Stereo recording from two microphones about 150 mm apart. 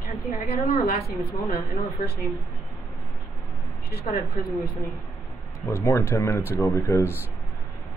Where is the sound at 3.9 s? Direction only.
70° left (ahead or behind).